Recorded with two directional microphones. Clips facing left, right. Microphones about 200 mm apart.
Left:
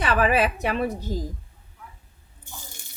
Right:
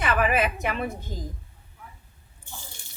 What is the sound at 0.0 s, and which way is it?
A woman's voice, 35° left (ahead or behind).